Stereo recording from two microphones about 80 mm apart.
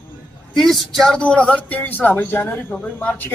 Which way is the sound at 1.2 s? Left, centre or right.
Centre.